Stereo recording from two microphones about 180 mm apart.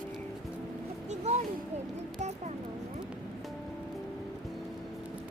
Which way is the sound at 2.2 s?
40° right (ahead or behind).